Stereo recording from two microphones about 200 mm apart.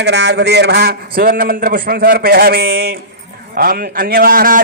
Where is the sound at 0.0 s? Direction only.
60° right (ahead or behind).